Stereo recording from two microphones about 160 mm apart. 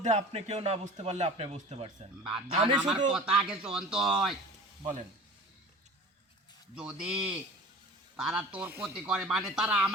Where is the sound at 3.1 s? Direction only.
5° right (ahead or behind).